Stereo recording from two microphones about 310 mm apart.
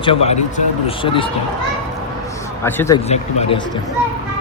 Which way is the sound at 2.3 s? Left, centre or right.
Centre.